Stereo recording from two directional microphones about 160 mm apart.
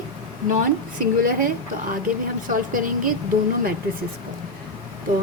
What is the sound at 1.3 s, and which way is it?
Speech, 60° right (ahead or behind).